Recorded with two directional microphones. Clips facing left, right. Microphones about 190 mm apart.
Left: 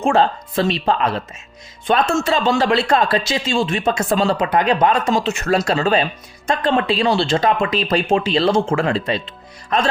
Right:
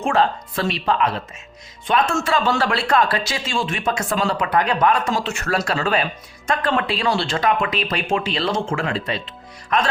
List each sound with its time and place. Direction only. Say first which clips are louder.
0.0 s speech: left 3 dB; 30° left (ahead or behind)